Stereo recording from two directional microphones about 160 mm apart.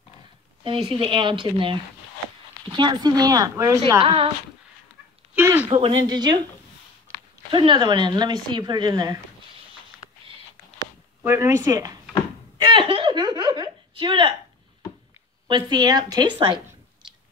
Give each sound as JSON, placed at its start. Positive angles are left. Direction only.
{"t": 0.8, "sound": "speech", "side_deg": -30}
{"t": 4.0, "sound": "speech", "side_deg": -30}
{"t": 5.3, "sound": "a sound", "side_deg": -10}
{"t": 5.7, "sound": "speech", "side_deg": -35}
{"t": 7.5, "sound": "speech", "side_deg": -30}
{"t": 11.2, "sound": "speech", "side_deg": -15}
{"t": 12.5, "sound": "a sound", "side_deg": -30}
{"t": 15.4, "sound": "speech", "side_deg": -30}